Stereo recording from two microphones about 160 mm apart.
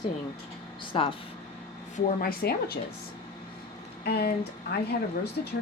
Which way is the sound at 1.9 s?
70° left (ahead or behind).